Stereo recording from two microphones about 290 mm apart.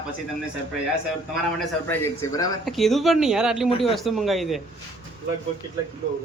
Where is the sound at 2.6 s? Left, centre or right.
Centre.